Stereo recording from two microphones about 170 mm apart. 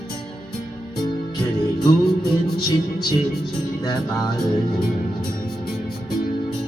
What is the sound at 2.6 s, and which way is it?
Music, 20° left (ahead or behind).